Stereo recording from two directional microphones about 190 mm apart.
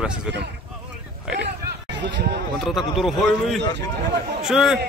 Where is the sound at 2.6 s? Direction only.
Centre (ahead or behind).